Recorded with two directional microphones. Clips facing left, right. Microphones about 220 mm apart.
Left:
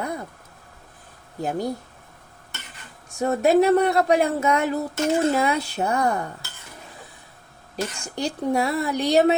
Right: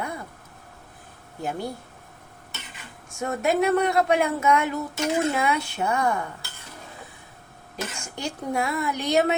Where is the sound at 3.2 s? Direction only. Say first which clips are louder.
Left 5 dB; 35° left (ahead or behind).